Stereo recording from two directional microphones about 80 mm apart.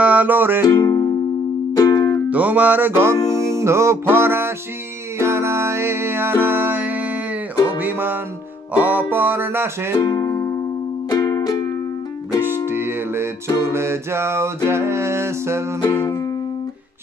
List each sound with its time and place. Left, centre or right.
0.0 s music: centre
0.7 s music: left
1.8 s music: left
2.2 s music: centre
3.3 s music: right
9.9 s speech: left
11.1 s music: left
12.4 s music: right
15.8 s music: left